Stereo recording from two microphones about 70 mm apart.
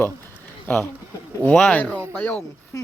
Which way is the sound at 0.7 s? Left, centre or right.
Left.